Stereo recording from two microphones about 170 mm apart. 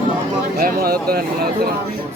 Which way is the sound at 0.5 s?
60° right (ahead or behind).